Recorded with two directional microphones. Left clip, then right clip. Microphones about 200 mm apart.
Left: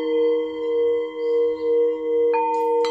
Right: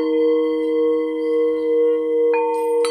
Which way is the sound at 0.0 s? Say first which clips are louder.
Right 3 dB; 10° right (ahead or behind).